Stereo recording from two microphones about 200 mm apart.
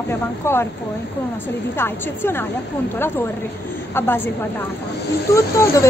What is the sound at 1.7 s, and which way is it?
Speech, 10° left (ahead or behind).